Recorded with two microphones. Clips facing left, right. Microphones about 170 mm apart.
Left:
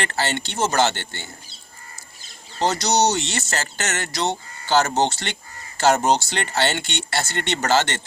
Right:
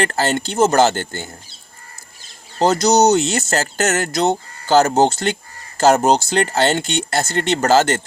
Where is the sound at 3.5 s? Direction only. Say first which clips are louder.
Right 9 dB; 40° right (ahead or behind).